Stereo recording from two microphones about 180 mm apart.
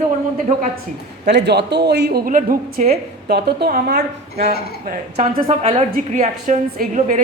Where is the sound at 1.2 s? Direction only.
70° right (ahead or behind); by 2.8 s 50° right (ahead or behind).